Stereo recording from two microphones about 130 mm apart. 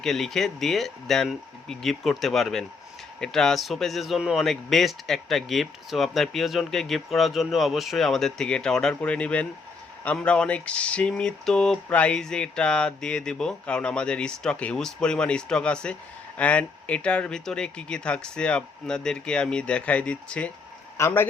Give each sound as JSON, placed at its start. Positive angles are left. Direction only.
{"t": 0.0, "sound": "speech", "side_deg": 5}